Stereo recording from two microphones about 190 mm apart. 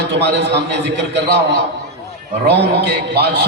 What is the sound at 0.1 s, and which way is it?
Speech, 60° right (ahead or behind).